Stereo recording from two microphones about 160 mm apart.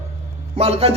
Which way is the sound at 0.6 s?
40° right (ahead or behind).